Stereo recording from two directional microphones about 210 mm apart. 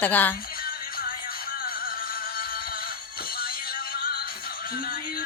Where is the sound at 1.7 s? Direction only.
45° left (ahead or behind).